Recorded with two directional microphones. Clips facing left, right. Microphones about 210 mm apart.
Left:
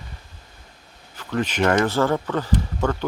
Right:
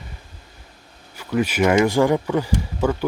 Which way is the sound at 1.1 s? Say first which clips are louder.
Right 3 dB; 10° right (ahead or behind).